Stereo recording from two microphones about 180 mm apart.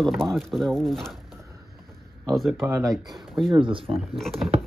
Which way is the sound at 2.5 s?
15° right (ahead or behind).